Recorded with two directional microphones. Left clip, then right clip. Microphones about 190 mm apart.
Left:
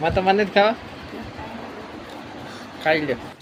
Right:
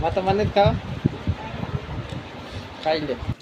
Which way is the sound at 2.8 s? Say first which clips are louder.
Left 3 dB; 25° left (ahead or behind).